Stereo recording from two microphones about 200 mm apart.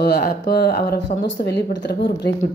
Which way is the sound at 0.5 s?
50° left (ahead or behind).